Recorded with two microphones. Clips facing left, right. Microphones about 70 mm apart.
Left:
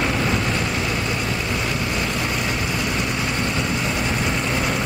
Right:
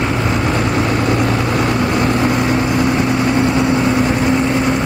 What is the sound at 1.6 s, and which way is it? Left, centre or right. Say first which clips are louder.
Vehicle: right 9 dB; right.